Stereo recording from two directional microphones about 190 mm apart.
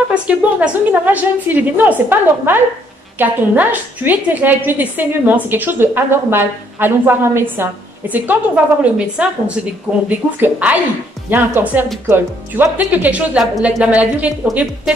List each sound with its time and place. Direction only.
0.1 s a woman's voice: 5° right (ahead or behind)